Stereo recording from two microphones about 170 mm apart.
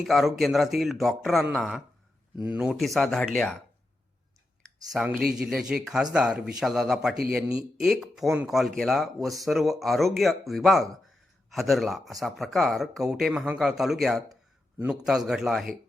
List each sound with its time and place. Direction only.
0.0 s speech: centre (ahead or behind)
4.9 s speech: 5° right (ahead or behind)